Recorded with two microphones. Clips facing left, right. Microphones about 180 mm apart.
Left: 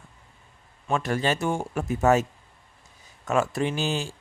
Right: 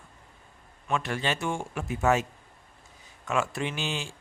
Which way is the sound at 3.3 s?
40° left (ahead or behind).